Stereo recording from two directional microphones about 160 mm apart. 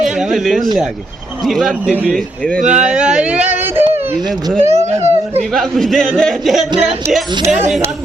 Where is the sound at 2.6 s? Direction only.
45° right (ahead or behind).